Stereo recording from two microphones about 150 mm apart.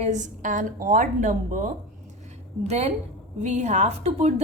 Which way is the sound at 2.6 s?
45° right (ahead or behind).